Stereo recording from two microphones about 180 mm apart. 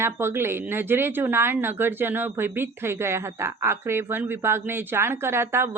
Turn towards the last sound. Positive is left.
turn(degrees=-15)  # may be behind; listen again after turning